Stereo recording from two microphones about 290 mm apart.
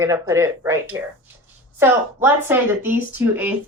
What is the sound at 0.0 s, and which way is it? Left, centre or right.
Speech, centre.